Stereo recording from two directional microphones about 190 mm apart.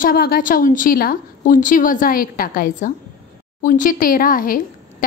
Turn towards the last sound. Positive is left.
turn(degrees=45)  # may be behind; listen again after turning